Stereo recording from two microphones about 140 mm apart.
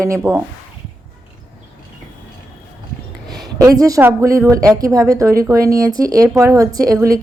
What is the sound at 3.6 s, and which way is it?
A woman's voice, 25° right (ahead or behind).